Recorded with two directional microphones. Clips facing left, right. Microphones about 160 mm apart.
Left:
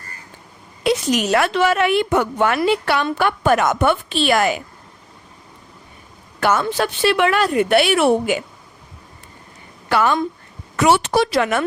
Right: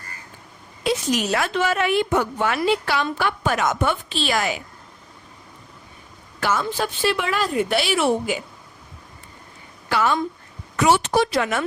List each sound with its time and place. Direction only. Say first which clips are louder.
0.9 s a woman's voice: left 4 dB; 75° left (ahead or behind); by 4.6 s 55° left (ahead or behind)
6.4 s a woman's voice: left 5 dB; 65° left (ahead or behind)
9.9 s a woman's voice: left 4 dB; 60° left (ahead or behind)